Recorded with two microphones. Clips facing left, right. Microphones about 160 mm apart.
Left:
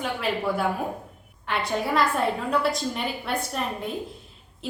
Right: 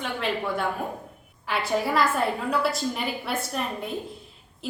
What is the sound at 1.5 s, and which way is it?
A woman's voice, 5° right (ahead or behind).